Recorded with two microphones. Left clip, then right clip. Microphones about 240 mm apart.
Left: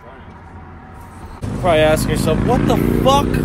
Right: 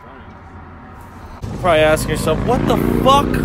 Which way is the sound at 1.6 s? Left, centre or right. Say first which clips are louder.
Right 1 dB; centre.